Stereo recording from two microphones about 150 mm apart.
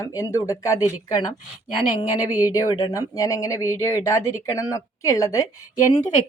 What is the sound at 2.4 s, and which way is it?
Speech, 25° left (ahead or behind).